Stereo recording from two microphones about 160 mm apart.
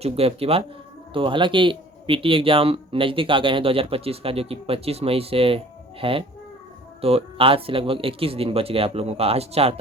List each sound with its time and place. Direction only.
0.0 s speech: 40° right (ahead or behind)